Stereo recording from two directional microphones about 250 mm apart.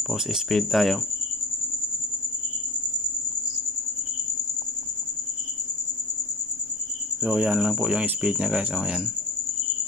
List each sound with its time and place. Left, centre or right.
0.1 s speech: centre
7.2 s speech: centre